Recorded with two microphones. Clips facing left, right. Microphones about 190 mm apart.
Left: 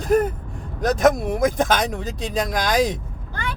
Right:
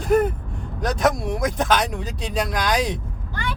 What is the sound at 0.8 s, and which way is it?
Speech, 50° left (ahead or behind).